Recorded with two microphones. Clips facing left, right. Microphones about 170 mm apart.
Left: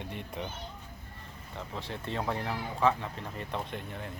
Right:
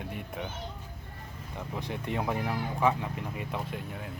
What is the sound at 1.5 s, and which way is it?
Speech, 15° right (ahead or behind).